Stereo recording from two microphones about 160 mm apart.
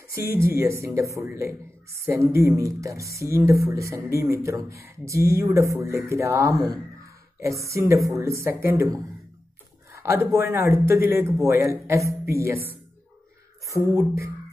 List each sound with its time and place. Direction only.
0.1 s speech: 15° right (ahead or behind)
9.9 s speech: 15° right (ahead or behind)
13.8 s speech: 20° right (ahead or behind)